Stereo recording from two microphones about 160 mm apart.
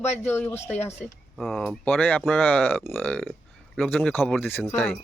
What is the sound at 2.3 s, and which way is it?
Speech, 10° left (ahead or behind).